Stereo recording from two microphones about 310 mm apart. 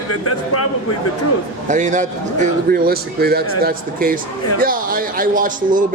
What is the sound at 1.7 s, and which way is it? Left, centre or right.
A man's voice, right.